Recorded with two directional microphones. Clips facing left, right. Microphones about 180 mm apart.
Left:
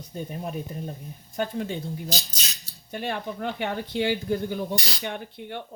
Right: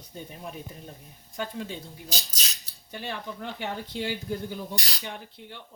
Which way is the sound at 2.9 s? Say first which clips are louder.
Left 5 dB; 55° left (ahead or behind).